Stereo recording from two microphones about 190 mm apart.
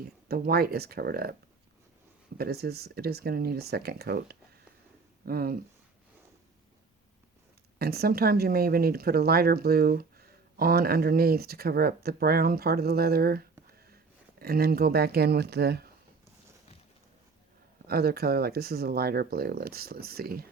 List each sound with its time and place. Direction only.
0.0 s speech: 50° right (ahead or behind)
2.4 s speech: 55° right (ahead or behind)
7.8 s speech: 55° right (ahead or behind)
17.8 s speech: 55° right (ahead or behind)